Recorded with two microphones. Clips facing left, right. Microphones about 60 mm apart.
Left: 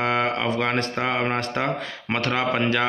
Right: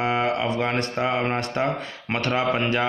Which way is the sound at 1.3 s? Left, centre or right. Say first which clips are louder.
Even; left.